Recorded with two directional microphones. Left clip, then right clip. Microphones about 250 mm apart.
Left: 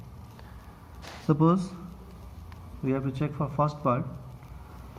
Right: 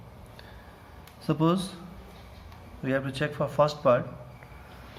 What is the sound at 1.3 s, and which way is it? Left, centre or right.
Speech, centre.